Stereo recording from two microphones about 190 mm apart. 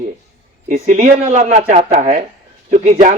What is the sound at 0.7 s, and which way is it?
A man's voice, 45° right (ahead or behind).